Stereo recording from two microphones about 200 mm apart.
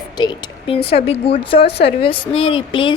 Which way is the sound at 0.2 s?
25° left (ahead or behind).